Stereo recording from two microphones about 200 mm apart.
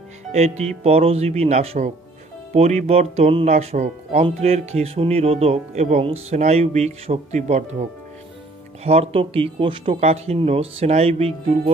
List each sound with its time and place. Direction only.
0.3 s speech: 35° right (ahead or behind)
8.8 s speech: 30° right (ahead or behind)